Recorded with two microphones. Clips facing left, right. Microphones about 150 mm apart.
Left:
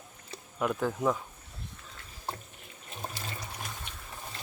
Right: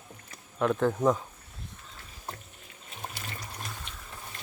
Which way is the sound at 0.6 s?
5° left (ahead or behind).